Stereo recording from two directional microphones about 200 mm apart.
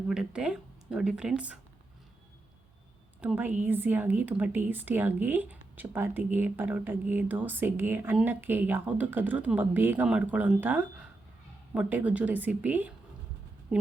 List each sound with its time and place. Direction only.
0.1 s speech: 5° right (ahead or behind)
3.2 s a woman's voice: 5° right (ahead or behind)